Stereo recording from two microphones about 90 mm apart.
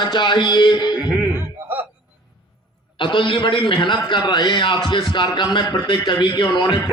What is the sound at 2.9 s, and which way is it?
A man's voice, 65° left (ahead or behind).